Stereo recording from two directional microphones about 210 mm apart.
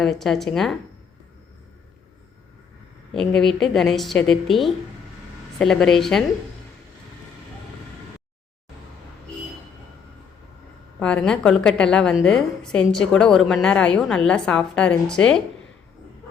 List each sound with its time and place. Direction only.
0.0 s a woman's voice: centre (ahead or behind)
3.1 s a woman's voice: 5° left (ahead or behind)
11.0 s a woman's voice: 5° left (ahead or behind)